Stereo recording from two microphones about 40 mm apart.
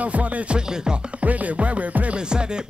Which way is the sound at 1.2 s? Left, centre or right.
Right.